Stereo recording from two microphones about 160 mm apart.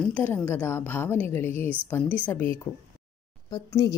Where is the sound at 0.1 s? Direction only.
10° left (ahead or behind).